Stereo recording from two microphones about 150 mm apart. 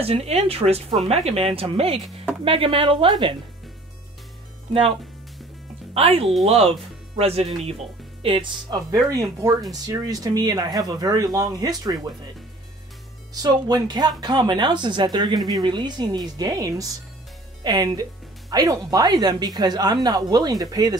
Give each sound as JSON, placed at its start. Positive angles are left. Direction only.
{"t": 0.0, "sound": "speech", "side_deg": -40}
{"t": 5.9, "sound": "speech", "side_deg": -40}
{"t": 13.3, "sound": "speech", "side_deg": -25}